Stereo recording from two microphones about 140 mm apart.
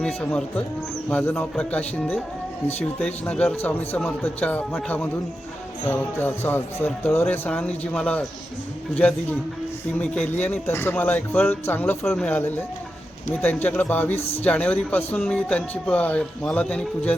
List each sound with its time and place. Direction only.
0.0 s speech: 5° left (ahead or behind)
5.9 s speech: 15° left (ahead or behind)
10.0 s speech: 10° left (ahead or behind)
12.4 s speech: 15° left (ahead or behind)